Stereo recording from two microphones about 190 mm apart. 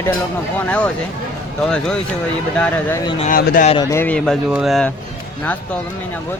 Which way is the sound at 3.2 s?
45° left (ahead or behind).